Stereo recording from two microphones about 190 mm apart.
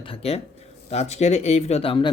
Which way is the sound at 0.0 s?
30° left (ahead or behind).